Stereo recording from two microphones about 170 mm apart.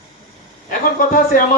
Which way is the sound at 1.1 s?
55° left (ahead or behind).